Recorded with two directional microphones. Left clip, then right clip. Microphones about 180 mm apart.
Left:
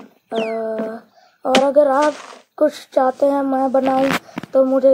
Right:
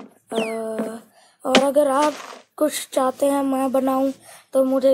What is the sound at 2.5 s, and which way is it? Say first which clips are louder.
Speech: left 5 dB; 10° right (ahead or behind).